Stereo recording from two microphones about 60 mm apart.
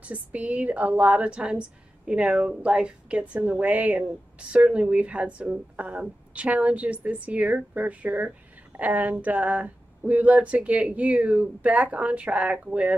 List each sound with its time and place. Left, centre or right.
0.0 s speech: right